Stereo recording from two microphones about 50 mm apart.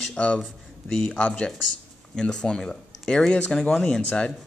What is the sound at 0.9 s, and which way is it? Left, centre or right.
Speech, centre.